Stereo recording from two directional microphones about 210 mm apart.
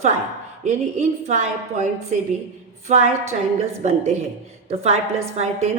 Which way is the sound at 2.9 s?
30° right (ahead or behind).